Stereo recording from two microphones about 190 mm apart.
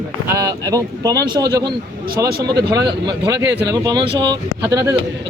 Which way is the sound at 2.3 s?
55° right (ahead or behind).